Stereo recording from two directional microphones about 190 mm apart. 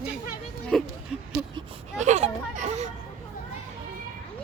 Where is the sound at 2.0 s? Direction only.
40° right (ahead or behind).